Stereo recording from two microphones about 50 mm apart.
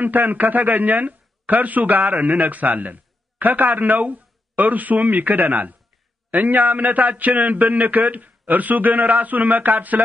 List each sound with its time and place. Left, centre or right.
0.0 s speech: right